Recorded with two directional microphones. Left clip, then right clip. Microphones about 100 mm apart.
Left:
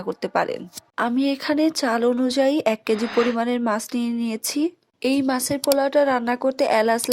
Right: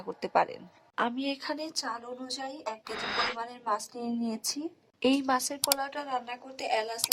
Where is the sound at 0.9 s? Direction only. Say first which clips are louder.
Left 8 dB; 90° left; by 4.5 s 65° left (ahead or behind).